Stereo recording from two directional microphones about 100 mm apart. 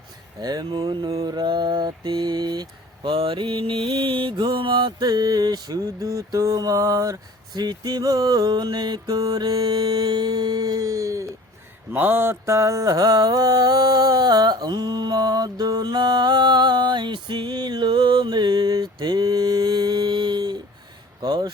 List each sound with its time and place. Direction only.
0.4 s mantra: 45° right (ahead or behind)
11.9 s mantra: 20° right (ahead or behind); by 21.5 s 45° right (ahead or behind)